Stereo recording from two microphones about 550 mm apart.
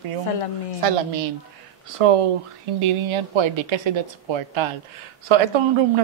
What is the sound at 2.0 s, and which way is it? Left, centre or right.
Speech, right.